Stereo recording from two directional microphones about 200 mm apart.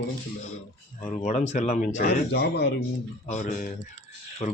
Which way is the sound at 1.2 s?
40° left (ahead or behind).